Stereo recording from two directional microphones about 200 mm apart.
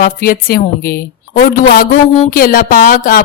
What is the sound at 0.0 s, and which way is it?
A woman's voice, 45° left (ahead or behind).